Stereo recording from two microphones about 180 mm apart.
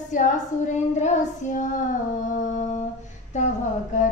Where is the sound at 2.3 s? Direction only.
40° left (ahead or behind).